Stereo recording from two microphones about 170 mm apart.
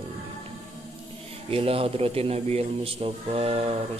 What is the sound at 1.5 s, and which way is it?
A man's voice, 35° right (ahead or behind).